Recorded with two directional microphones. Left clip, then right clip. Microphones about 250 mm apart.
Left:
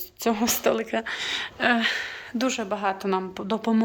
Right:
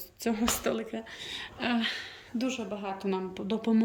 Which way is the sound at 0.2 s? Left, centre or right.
Centre.